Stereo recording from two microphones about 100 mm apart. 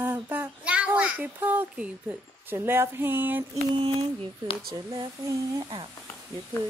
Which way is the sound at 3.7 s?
70° right (ahead or behind).